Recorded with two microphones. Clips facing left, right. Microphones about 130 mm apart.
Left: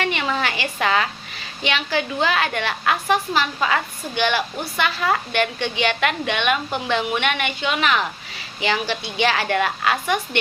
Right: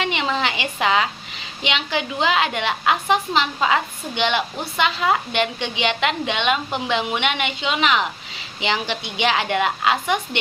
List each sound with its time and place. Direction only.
0.0 s a woman's voice: 20° right (ahead or behind)